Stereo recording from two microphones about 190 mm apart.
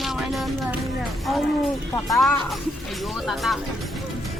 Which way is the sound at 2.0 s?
Centre (ahead or behind).